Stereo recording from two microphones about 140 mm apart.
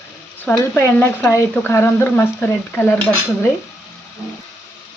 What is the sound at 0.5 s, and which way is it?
Speech, 15° left (ahead or behind).